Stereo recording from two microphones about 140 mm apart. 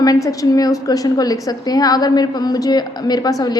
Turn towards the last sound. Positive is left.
turn(degrees=25)  # may be behind; listen again after turning